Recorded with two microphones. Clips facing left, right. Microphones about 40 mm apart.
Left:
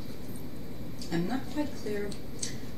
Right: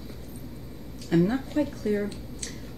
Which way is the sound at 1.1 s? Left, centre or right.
Right.